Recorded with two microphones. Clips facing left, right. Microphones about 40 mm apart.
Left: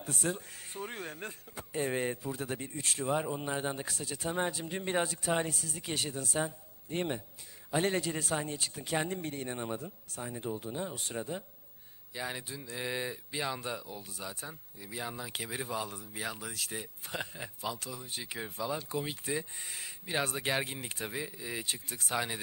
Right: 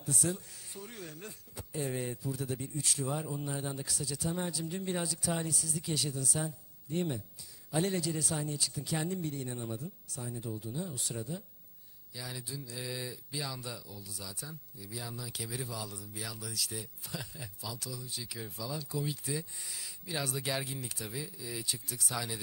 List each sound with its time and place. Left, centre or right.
0.0 s speech: left